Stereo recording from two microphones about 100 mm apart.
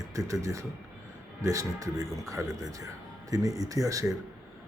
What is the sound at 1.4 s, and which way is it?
Speech, 30° right (ahead or behind).